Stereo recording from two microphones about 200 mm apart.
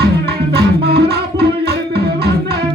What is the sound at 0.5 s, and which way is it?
Music, 55° right (ahead or behind).